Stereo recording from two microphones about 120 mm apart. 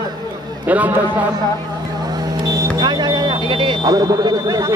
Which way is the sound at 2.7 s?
35° right (ahead or behind).